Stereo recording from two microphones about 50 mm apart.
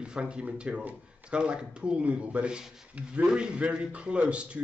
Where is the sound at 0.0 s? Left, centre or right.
Centre.